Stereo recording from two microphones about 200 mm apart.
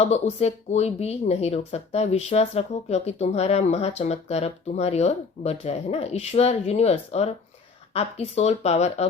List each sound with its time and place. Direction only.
0.0 s speech: 30° left (ahead or behind)